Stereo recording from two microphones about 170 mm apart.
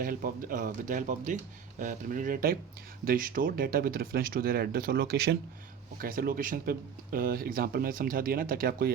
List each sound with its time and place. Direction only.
0.0 s speech: 55° right (ahead or behind)
6.0 s speech: 55° right (ahead or behind)